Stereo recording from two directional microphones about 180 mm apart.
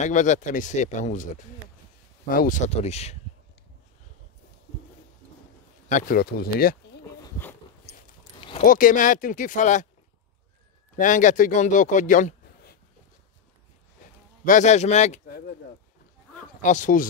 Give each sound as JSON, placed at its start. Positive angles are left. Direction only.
{"t": 0.0, "sound": "speech", "side_deg": 45}
{"t": 5.9, "sound": "speech", "side_deg": 45}
{"t": 7.2, "sound": "dog", "side_deg": 10}
{"t": 8.4, "sound": "a sound", "side_deg": 30}
{"t": 8.6, "sound": "speech", "side_deg": 50}
{"t": 11.0, "sound": "speech", "side_deg": 45}
{"t": 14.4, "sound": "speech", "side_deg": 45}
{"t": 15.2, "sound": "speech", "side_deg": 60}
{"t": 16.6, "sound": "speech", "side_deg": 45}